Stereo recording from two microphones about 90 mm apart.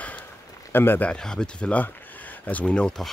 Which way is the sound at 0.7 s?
25° left (ahead or behind).